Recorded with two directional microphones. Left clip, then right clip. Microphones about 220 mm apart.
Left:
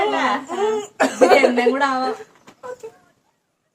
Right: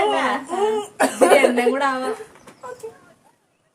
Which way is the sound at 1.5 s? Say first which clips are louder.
Left 1 dB; 15° right (ahead or behind).